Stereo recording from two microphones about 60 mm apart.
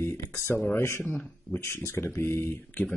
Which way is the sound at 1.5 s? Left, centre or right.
Left.